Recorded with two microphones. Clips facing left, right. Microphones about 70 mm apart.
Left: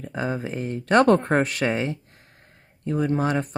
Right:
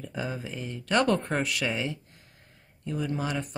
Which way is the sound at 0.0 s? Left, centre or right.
Left.